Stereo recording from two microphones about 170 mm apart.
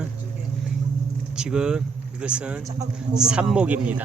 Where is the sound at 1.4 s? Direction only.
5° right (ahead or behind).